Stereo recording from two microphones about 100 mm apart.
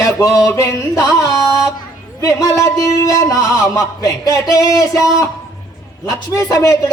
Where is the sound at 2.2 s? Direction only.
35° left (ahead or behind).